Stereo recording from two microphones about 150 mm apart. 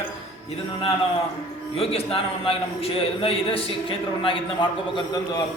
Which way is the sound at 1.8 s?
40° left (ahead or behind).